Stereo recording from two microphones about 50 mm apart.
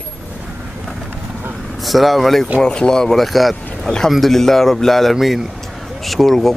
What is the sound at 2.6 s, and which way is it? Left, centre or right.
Speech, centre.